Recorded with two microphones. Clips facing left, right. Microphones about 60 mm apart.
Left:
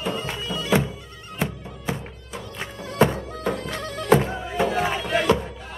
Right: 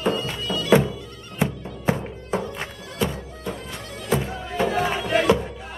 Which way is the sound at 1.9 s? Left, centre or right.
Right.